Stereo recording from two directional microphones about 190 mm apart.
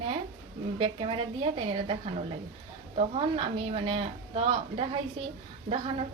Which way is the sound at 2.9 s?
30° right (ahead or behind).